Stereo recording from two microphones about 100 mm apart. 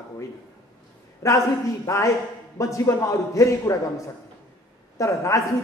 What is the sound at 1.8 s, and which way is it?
A man's voice, 30° left (ahead or behind).